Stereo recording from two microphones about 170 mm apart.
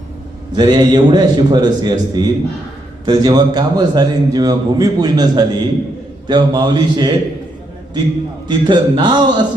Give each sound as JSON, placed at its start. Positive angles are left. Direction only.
{"t": 0.5, "sound": "speech", "side_deg": -25}
{"t": 8.4, "sound": "speech", "side_deg": -25}